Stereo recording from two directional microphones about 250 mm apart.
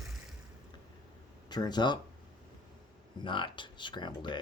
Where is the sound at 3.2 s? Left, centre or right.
Centre.